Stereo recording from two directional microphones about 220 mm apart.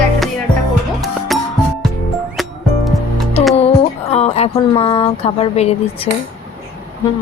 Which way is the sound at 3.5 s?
30° left (ahead or behind).